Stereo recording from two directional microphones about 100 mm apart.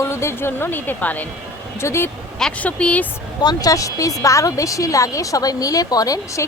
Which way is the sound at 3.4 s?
40° left (ahead or behind).